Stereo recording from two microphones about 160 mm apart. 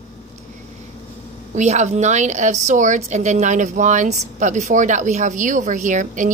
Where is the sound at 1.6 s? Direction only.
45° right (ahead or behind).